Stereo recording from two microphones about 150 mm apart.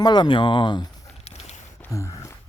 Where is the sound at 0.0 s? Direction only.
30° left (ahead or behind).